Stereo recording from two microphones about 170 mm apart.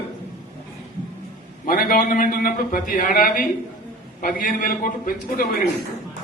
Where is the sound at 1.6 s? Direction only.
55° left (ahead or behind).